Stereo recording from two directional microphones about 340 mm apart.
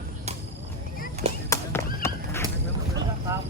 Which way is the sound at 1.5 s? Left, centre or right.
Centre.